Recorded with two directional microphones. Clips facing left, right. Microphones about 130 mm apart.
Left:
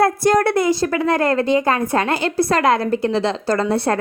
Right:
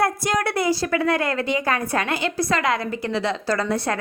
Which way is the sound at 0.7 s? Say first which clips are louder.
Left 3 dB; 25° left (ahead or behind).